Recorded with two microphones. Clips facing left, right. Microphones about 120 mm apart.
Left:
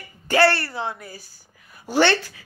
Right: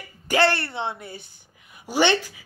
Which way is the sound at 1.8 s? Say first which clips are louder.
Left 2 dB; 15° right (ahead or behind).